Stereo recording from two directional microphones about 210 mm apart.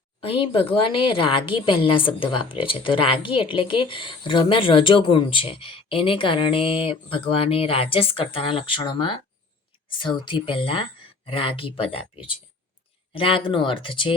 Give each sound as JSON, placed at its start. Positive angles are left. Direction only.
{"t": 0.2, "sound": "speech", "side_deg": 25}